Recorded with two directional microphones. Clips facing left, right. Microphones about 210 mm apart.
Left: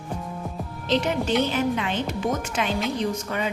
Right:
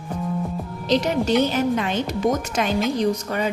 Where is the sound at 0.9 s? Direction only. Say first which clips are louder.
Right 3 dB; 40° right (ahead or behind).